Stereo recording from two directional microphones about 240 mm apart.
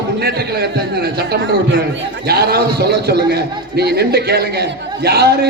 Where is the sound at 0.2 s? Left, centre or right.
Right.